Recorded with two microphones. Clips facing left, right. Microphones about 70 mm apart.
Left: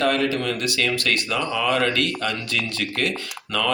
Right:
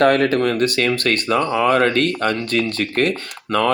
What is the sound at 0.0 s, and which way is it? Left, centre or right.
Speech, right.